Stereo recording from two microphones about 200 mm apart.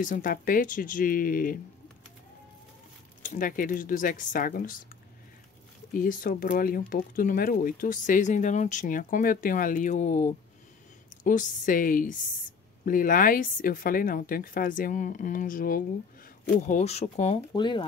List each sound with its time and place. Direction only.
0.0 s speech: 45° left (ahead or behind)
3.2 s speech: 40° left (ahead or behind)
5.9 s speech: 45° left (ahead or behind)
17.4 s speech: 20° left (ahead or behind)